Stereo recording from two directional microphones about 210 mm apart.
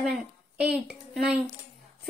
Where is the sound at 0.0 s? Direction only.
Centre (ahead or behind).